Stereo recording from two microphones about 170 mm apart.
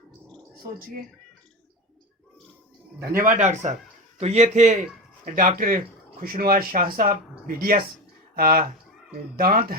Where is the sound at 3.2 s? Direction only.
45° right (ahead or behind).